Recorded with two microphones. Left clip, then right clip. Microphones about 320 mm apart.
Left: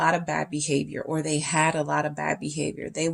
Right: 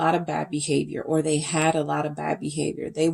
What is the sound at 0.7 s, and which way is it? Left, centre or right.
Speech, left.